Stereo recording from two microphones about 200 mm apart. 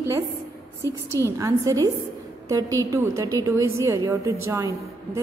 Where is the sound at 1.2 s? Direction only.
15° right (ahead or behind).